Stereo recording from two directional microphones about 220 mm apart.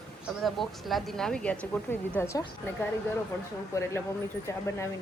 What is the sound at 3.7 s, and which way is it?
Speech, 15° left (ahead or behind).